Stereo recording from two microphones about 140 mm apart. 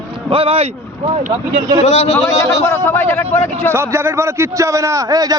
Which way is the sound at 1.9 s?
55° left (ahead or behind).